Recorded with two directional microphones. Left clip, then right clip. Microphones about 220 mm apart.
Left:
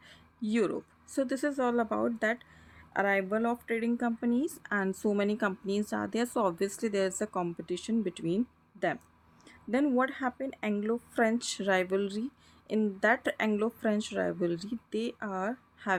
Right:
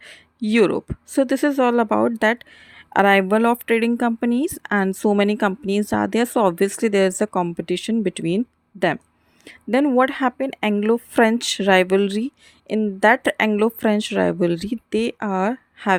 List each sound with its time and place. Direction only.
0.0 s speech: 35° right (ahead or behind)
9.4 s speech: 35° right (ahead or behind)